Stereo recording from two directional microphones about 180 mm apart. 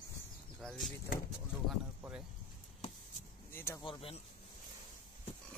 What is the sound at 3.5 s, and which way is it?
Speech, 15° left (ahead or behind).